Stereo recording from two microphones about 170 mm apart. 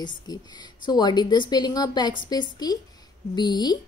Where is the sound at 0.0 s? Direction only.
25° left (ahead or behind).